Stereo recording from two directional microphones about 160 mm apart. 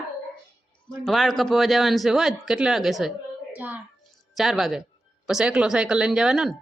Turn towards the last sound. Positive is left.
turn(degrees=-5)  # may be behind; listen again after turning